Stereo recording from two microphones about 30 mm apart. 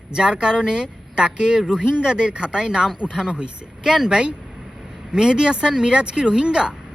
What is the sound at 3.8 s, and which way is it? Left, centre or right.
Speech, centre.